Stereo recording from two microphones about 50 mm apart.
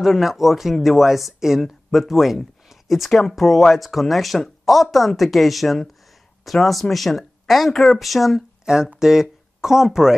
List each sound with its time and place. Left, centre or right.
0.0 s speech: centre
8.7 s speech: centre